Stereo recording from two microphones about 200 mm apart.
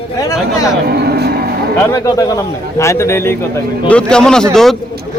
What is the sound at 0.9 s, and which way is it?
Vehicle, 55° right (ahead or behind).